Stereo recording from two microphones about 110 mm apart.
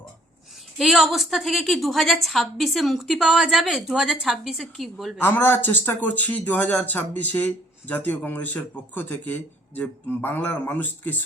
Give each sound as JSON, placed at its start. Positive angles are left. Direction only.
{"t": 0.8, "sound": "a woman's voice", "side_deg": 0}
{"t": 5.2, "sound": "speech", "side_deg": 20}